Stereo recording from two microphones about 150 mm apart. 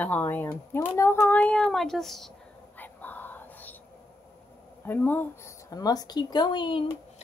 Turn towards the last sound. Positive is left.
turn(degrees=35)  # may be behind; listen again after turning